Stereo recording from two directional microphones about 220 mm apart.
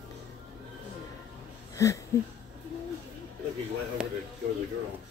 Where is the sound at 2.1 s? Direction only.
15° left (ahead or behind).